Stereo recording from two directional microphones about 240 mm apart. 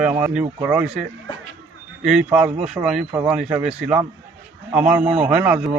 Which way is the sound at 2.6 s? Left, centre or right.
Centre.